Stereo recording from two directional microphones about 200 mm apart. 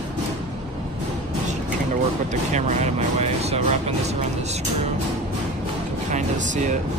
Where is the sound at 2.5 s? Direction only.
35° right (ahead or behind).